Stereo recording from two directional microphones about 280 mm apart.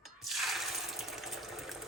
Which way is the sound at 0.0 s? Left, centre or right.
Centre.